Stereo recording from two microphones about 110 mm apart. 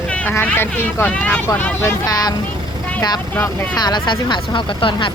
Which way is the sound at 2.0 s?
35° left (ahead or behind).